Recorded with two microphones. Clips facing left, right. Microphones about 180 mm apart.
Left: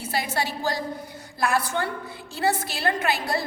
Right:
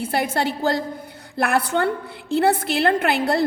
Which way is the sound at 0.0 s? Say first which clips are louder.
Right 6 dB; 55° right (ahead or behind).